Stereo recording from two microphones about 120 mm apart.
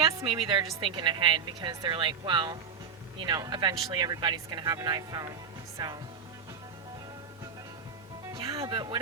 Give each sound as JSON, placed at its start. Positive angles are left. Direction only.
{"t": 0.3, "sound": "a woman's voice", "side_deg": -45}
{"t": 8.3, "sound": "music", "side_deg": -30}
{"t": 8.7, "sound": "speech", "side_deg": -40}